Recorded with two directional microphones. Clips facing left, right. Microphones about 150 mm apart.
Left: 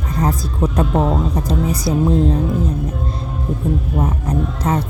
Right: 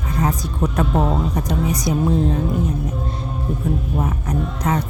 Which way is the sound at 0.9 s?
Centre (ahead or behind).